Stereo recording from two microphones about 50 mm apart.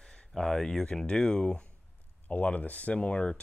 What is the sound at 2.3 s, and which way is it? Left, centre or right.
Speech, left.